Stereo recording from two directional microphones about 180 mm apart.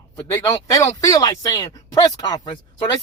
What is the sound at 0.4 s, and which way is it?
Speech, 20° left (ahead or behind).